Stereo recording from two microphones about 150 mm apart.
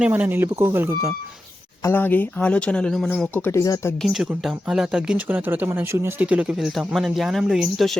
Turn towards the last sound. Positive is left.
turn(degrees=0)  # may be behind; listen again after turning